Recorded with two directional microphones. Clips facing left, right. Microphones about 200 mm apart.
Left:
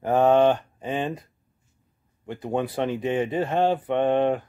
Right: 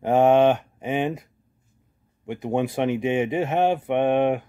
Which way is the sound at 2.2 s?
20° right (ahead or behind).